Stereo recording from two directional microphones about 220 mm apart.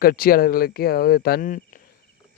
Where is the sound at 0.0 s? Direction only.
45° left (ahead or behind).